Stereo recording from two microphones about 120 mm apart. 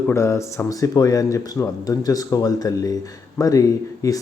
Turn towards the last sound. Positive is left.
turn(degrees=30)  # may be behind; listen again after turning